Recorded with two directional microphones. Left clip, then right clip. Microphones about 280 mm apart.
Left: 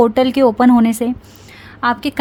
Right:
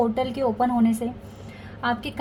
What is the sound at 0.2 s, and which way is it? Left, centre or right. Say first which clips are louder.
A woman's voice: left 11 dB; left.